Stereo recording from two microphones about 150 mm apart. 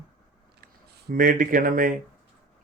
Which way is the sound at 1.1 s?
65° right (ahead or behind).